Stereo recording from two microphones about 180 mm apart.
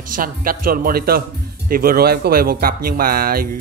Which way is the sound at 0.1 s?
50° right (ahead or behind).